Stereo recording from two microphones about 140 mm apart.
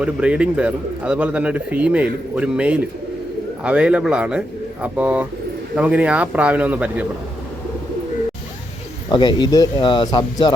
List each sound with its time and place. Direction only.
0.0 s speech: 10° right (ahead or behind)
9.0 s speech: 30° left (ahead or behind)